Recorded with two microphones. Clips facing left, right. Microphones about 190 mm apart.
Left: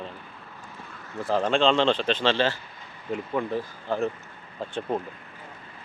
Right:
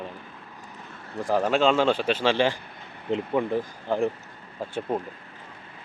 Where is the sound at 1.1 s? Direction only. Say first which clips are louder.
Right 1 dB; 15° right (ahead or behind).